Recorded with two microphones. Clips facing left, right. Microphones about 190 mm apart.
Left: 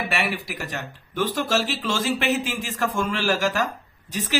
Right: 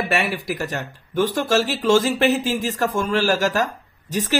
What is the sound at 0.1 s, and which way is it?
Speech, 45° right (ahead or behind).